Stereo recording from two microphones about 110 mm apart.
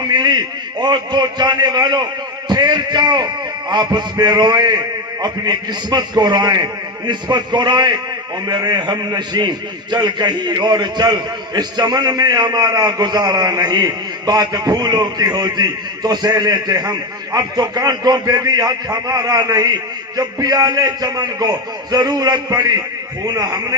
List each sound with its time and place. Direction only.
0.1 s a man's voice: 40° right (ahead or behind)